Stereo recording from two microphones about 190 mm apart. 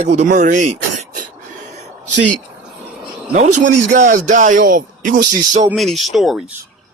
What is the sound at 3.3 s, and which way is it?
Speech, 40° right (ahead or behind).